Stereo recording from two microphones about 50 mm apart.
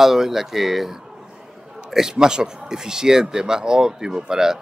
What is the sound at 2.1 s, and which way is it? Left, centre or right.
A man's voice, centre.